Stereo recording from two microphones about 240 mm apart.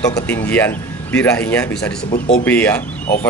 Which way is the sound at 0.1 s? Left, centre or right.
Centre.